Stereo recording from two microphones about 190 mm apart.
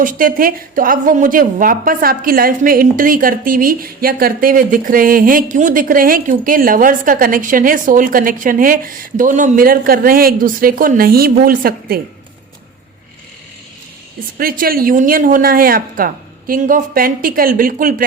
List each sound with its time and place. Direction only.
0.0 s a woman's voice: 45° right (ahead or behind)
14.3 s a woman's voice: 50° right (ahead or behind)